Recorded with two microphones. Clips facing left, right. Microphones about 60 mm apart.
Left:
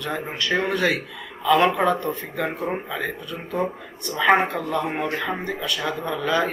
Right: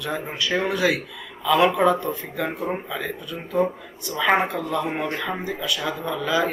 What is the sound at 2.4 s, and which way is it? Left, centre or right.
Speech, centre.